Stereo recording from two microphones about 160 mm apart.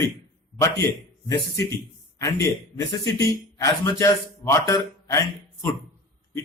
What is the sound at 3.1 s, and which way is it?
A man's voice, 15° left (ahead or behind).